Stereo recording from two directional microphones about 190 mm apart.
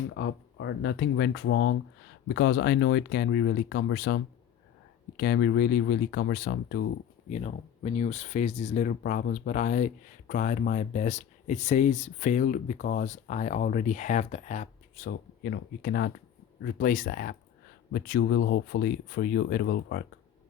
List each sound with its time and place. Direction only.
0.1 s speech: 70° left (ahead or behind)
7.3 s speech: 35° left (ahead or behind); by 18.2 s 55° left (ahead or behind)
18.2 s speech: 70° left (ahead or behind)